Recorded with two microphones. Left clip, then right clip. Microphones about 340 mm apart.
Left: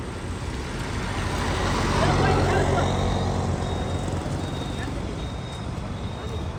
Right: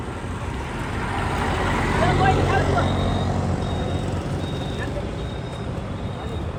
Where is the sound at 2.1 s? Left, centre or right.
Centre.